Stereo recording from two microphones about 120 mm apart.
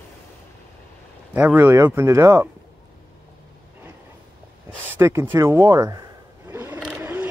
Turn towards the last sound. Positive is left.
turn(degrees=-15)  # may be behind; listen again after turning